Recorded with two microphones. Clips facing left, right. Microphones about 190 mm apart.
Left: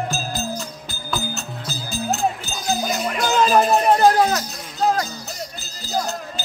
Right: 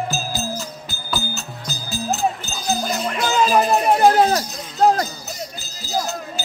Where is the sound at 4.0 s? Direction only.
25° right (ahead or behind).